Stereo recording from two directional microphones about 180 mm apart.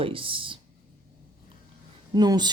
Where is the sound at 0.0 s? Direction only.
30° right (ahead or behind).